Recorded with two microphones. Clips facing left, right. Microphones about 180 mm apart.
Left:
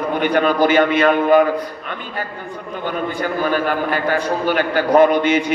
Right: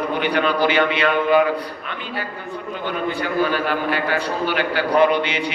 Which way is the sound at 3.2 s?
45° left (ahead or behind).